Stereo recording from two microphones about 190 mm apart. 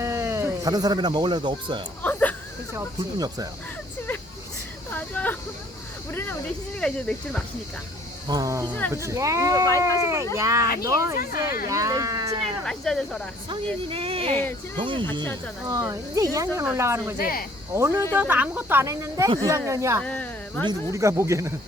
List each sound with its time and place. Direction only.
0.0 s speech: 15° right (ahead or behind)
2.0 s whimper: 10° left (ahead or behind)
2.7 s speech: 20° right (ahead or behind)
4.9 s a sound: 10° left (ahead or behind)
6.7 s speech: 5° left (ahead or behind)
8.3 s speech: 20° right (ahead or behind)
12.6 s speech: 5° left (ahead or behind)
13.8 s speech: 30° right (ahead or behind)
17.2 s speech: 50° left (ahead or behind)
17.7 s speech: 15° right (ahead or behind)
20.0 s a sound: 5° left (ahead or behind)
20.7 s speech: 15° right (ahead or behind)